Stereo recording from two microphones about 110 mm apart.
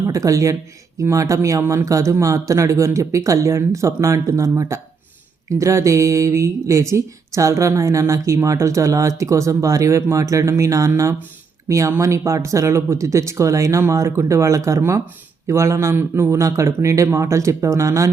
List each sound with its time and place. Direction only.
0.0 s speech: 30° right (ahead or behind)